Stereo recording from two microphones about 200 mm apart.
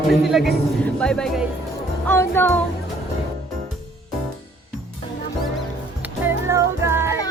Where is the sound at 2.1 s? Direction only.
10° left (ahead or behind).